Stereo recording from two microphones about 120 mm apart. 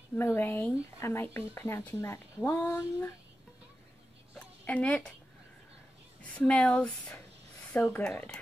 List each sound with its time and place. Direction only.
0.1 s speech: 20° left (ahead or behind)
4.6 s speech: 10° left (ahead or behind)
6.3 s speech: 10° left (ahead or behind)